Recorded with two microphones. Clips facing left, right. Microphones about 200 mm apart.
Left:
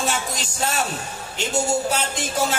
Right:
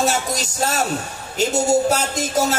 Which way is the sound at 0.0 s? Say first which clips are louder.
Right 5 dB; 40° right (ahead or behind).